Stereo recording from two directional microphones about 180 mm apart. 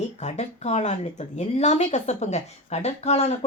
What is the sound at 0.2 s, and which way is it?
Speech, 40° left (ahead or behind).